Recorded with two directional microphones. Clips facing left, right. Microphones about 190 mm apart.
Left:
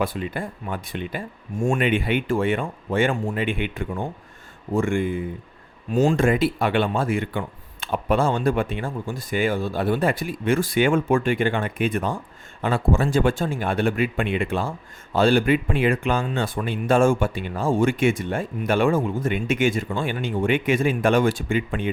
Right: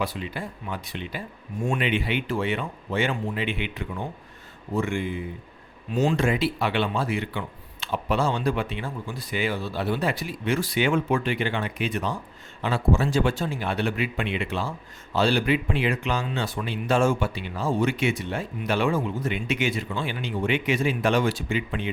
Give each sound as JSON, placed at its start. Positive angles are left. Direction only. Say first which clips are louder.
{"t": 0.0, "sound": "speech", "louder": "left 4 dB", "side_deg": 50}